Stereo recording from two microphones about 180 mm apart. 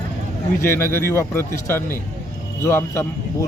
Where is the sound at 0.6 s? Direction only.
15° left (ahead or behind).